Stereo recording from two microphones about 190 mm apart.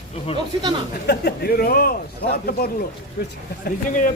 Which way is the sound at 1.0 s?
55° left (ahead or behind).